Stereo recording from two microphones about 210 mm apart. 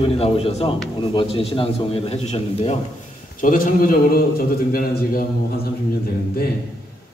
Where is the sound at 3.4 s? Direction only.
40° left (ahead or behind).